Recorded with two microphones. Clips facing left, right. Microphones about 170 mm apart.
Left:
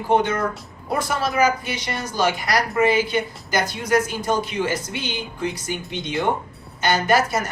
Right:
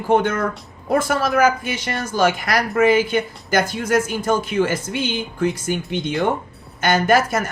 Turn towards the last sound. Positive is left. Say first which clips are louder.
# right 3 dB
turn(degrees=-50)  # may be behind; listen again after turning